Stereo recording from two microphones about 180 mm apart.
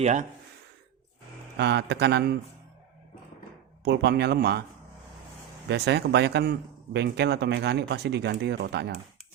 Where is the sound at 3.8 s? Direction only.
70° right (ahead or behind).